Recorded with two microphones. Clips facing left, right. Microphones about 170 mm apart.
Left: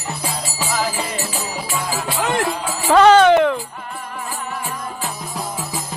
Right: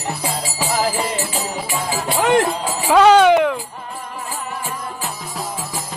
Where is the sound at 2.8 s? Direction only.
5° right (ahead or behind).